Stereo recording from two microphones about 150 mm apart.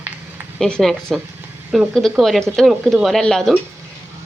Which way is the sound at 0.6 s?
Centre (ahead or behind).